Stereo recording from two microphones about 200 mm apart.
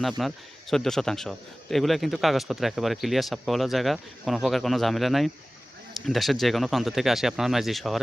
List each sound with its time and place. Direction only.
0.2 s a man's voice: centre (ahead or behind)